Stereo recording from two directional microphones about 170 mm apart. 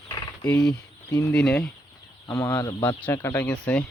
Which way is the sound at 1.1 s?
15° left (ahead or behind).